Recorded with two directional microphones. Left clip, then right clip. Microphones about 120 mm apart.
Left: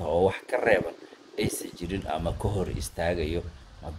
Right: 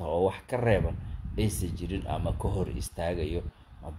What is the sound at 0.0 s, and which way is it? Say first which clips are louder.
Speech: left 3 dB; 30° right (ahead or behind).